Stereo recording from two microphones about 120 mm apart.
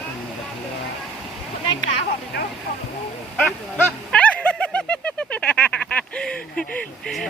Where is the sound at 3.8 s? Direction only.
10° left (ahead or behind).